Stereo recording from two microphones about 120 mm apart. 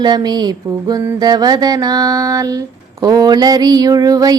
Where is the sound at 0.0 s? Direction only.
35° right (ahead or behind).